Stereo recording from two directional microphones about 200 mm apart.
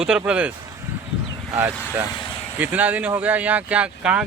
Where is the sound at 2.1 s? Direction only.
25° left (ahead or behind).